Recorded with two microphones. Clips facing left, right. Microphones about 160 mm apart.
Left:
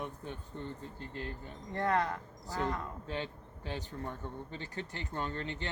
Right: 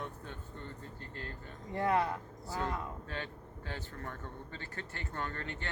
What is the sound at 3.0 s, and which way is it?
Speech, 20° left (ahead or behind).